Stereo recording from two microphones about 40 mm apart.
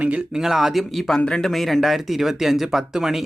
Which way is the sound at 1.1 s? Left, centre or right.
Centre.